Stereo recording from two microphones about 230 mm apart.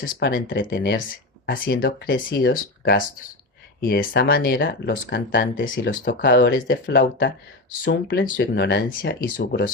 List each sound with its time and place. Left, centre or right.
0.0 s speech: left
5.6 s speech: left